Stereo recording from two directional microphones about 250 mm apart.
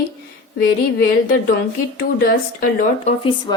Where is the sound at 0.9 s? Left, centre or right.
Left.